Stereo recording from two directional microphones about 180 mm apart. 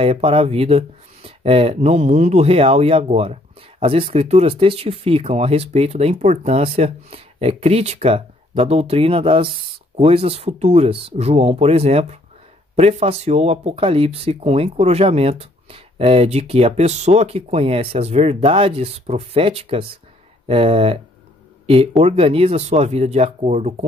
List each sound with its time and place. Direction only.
0.0 s speech: 30° right (ahead or behind)
22.0 s speech: 30° right (ahead or behind)